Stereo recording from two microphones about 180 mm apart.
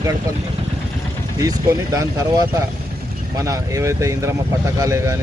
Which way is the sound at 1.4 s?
20° right (ahead or behind).